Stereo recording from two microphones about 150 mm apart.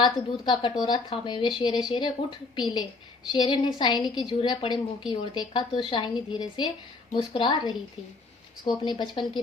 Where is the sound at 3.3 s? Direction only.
30° left (ahead or behind).